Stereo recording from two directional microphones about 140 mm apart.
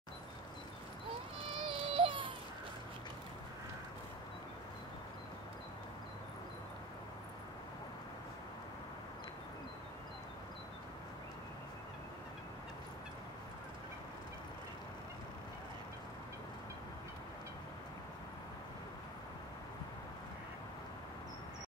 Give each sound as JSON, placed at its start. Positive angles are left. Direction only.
{"t": 1.4, "sound": "baby cry", "side_deg": -40}